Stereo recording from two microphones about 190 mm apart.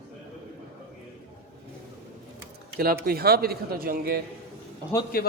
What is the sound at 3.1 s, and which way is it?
Speech, 55° right (ahead or behind).